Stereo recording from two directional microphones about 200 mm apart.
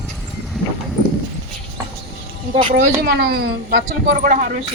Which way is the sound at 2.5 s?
30° right (ahead or behind).